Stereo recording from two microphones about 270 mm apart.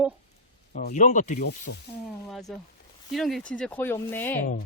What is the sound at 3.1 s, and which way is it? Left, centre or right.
Speech, centre.